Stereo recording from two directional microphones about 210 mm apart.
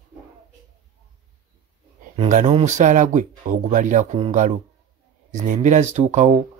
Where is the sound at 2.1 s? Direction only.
35° right (ahead or behind).